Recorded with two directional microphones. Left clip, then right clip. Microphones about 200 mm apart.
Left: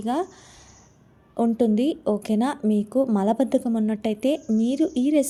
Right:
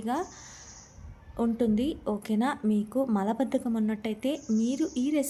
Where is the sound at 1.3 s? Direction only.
25° left (ahead or behind).